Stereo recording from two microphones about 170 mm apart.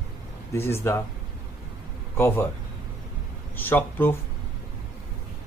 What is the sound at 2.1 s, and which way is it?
Speech, 15° left (ahead or behind).